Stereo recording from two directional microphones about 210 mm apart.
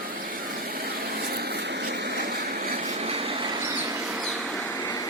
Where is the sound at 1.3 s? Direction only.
50° right (ahead or behind).